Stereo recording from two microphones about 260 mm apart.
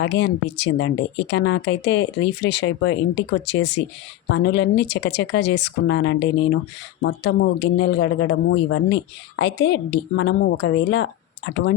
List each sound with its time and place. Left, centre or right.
0.0 s speech: left